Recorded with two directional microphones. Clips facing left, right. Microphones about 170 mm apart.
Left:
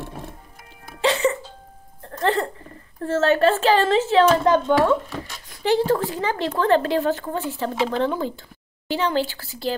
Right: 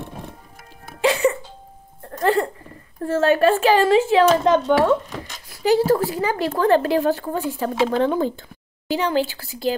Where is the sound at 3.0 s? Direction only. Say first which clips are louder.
Right 1 dB; 15° right (ahead or behind).